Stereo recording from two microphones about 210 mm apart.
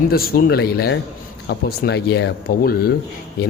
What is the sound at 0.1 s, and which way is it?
A man's voice, 45° left (ahead or behind).